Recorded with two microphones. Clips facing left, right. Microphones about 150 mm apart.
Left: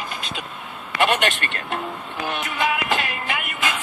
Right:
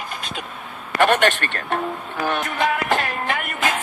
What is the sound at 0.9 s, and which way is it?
Music, 45° right (ahead or behind).